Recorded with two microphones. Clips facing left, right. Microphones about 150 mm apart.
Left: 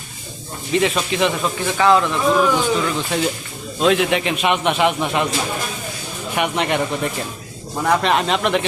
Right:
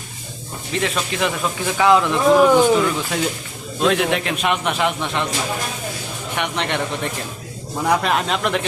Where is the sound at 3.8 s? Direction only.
Centre (ahead or behind).